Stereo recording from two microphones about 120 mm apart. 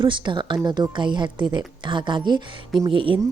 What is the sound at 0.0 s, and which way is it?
Speech, 40° right (ahead or behind).